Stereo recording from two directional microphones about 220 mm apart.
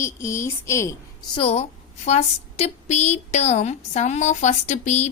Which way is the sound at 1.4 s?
30° left (ahead or behind).